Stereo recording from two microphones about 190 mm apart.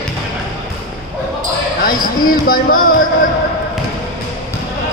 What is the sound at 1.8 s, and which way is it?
A man's voice, 50° left (ahead or behind).